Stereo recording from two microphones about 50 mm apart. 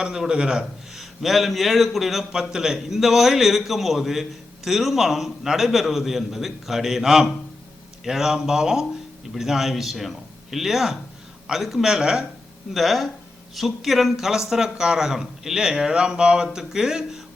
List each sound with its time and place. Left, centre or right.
0.0 s a man's voice: centre
0.9 s a man's voice: centre
12.7 s a man's voice: centre